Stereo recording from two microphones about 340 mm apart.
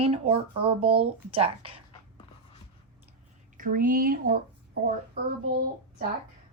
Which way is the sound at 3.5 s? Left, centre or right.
Right.